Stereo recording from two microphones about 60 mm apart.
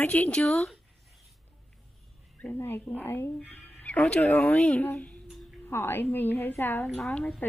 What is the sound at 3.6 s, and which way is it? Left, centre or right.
Speech, left.